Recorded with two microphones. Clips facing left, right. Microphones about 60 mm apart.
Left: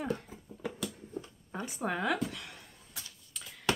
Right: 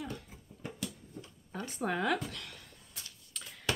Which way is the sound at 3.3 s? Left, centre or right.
Centre.